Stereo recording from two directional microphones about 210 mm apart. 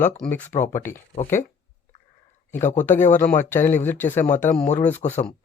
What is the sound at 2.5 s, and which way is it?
Speech, 35° left (ahead or behind).